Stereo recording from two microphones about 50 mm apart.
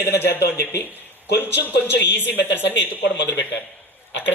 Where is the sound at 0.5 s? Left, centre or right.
Left.